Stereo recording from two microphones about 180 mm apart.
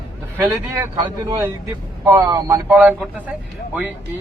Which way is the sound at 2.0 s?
15° right (ahead or behind).